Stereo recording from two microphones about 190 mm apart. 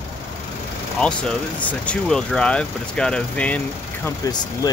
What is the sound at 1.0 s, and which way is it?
Speech, 5° left (ahead or behind).